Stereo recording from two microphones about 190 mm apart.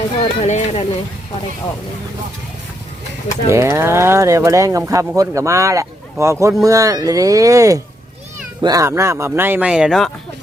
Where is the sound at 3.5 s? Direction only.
15° right (ahead or behind).